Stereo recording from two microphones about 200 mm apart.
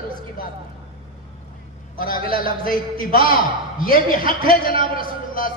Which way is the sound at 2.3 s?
45° left (ahead or behind).